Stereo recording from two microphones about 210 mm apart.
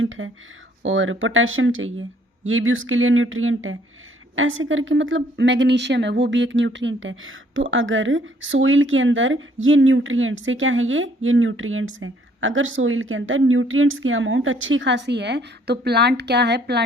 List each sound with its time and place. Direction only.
0.0 s speech: 70° right (ahead or behind); by 16.8 s 50° right (ahead or behind)